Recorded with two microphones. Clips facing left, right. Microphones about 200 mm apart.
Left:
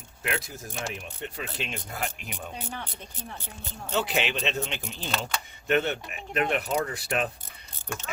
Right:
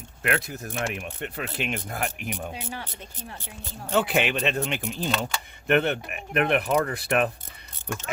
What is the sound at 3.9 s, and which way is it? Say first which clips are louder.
Speech: right 4 dB; 55° right (ahead or behind).